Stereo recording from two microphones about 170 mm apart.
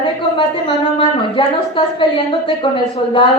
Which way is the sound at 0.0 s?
30° left (ahead or behind).